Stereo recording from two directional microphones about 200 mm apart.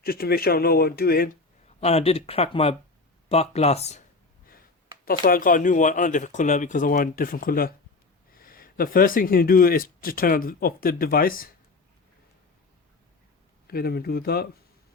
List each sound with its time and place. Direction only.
0.0 s speech: 50° left (ahead or behind)
1.8 s speech: 30° left (ahead or behind)
5.0 s speech: 45° left (ahead or behind)
13.7 s speech: 50° left (ahead or behind)